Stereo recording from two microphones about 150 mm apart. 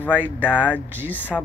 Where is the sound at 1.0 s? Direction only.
10° left (ahead or behind).